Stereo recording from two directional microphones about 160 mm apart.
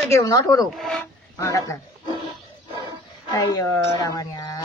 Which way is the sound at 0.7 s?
Centre (ahead or behind).